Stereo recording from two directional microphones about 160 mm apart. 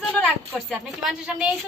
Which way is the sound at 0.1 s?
5° left (ahead or behind).